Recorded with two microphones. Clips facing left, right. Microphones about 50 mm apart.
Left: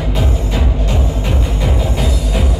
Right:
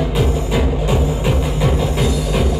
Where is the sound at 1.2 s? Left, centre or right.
Centre.